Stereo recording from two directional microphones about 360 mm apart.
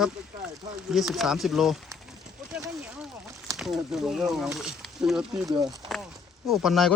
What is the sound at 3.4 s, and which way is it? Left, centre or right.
Speech, centre.